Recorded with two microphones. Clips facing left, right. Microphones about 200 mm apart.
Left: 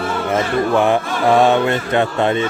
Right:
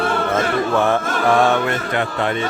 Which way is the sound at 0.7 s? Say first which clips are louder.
Left 3 dB; 15° left (ahead or behind).